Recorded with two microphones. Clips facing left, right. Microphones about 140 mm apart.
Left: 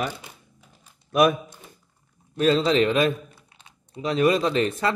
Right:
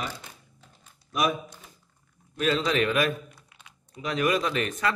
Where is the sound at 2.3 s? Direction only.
30° left (ahead or behind).